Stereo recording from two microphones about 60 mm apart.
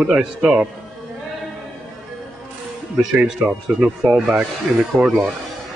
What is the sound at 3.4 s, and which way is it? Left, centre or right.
Speech, right.